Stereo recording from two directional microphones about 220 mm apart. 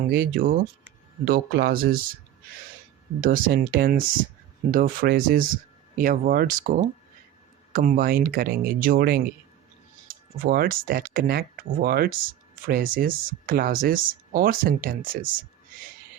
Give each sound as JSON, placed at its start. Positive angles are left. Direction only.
{"t": 0.2, "sound": "speech", "side_deg": -40}
{"t": 3.2, "sound": "speech", "side_deg": -40}